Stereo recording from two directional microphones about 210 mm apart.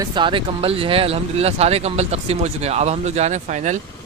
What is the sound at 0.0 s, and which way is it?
Speech, 20° right (ahead or behind).